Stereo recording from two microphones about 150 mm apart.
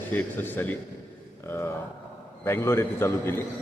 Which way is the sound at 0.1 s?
10° left (ahead or behind).